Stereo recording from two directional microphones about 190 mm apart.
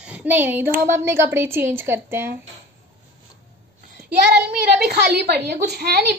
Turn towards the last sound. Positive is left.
turn(degrees=-55)  # may be behind; listen again after turning